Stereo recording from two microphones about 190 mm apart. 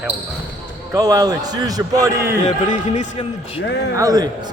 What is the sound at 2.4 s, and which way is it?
Speech, 35° left (ahead or behind).